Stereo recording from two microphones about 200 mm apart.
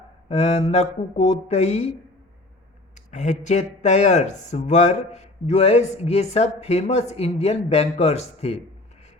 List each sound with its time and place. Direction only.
0.3 s speech: 30° left (ahead or behind)
2.9 s speech: 35° left (ahead or behind)